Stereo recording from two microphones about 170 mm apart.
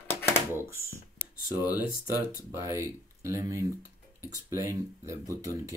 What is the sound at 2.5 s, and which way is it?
Speech, 15° right (ahead or behind).